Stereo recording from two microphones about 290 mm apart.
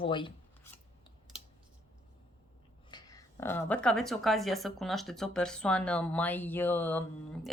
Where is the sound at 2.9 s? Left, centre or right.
Centre.